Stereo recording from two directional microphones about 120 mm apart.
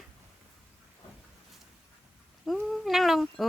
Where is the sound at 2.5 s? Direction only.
Centre (ahead or behind).